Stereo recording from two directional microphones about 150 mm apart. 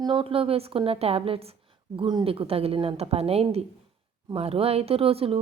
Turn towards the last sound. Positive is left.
turn(degrees=-40)  # may be behind; listen again after turning